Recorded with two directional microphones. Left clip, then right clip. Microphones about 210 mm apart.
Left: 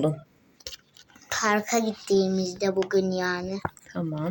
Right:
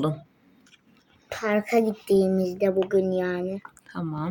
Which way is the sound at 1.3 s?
10° right (ahead or behind).